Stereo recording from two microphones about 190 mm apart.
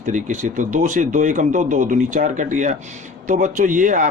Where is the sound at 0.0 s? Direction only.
40° right (ahead or behind).